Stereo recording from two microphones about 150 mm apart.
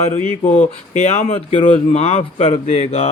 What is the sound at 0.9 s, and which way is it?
A man's voice, 50° left (ahead or behind).